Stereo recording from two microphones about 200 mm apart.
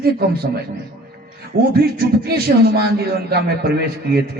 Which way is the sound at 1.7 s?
50° right (ahead or behind).